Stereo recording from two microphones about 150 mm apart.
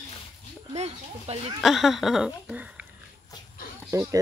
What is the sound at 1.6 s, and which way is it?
Speech, centre (ahead or behind).